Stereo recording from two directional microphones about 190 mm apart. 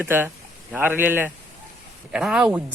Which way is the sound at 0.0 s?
10° right (ahead or behind).